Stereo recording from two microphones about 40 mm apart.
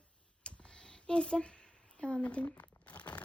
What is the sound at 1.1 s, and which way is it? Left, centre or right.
A child's voice, left.